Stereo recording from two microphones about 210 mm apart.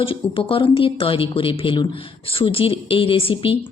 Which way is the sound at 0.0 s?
25° left (ahead or behind).